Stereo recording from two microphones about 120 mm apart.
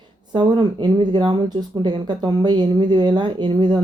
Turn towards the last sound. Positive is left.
turn(degrees=-40)  # may be behind; listen again after turning